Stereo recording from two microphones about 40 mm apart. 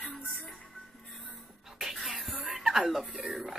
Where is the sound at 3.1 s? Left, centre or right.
Centre.